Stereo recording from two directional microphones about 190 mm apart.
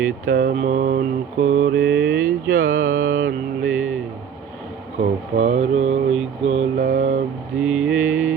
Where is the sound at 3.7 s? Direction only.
5° right (ahead or behind).